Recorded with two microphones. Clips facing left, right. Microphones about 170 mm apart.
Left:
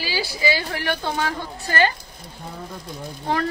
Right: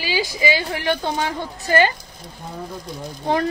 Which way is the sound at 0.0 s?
15° right (ahead or behind).